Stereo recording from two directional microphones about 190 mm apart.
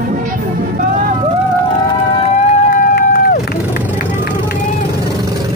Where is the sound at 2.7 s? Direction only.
50° left (ahead or behind).